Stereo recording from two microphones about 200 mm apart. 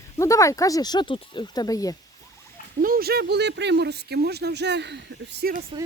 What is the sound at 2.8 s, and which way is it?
Speech, 45° right (ahead or behind).